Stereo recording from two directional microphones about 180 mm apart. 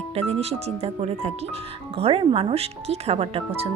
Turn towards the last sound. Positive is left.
turn(degrees=-35)  # may be behind; listen again after turning